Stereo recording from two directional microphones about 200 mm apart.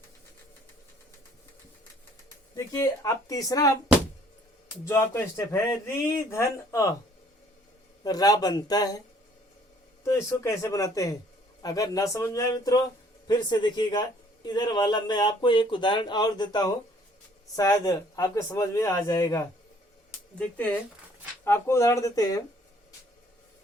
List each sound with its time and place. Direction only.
2.6 s a man's voice: 15° left (ahead or behind)
4.9 s a man's voice: 15° left (ahead or behind)
8.0 s a man's voice: 20° left (ahead or behind)
10.0 s a man's voice: 15° left (ahead or behind)
21.4 s a man's voice: 15° left (ahead or behind)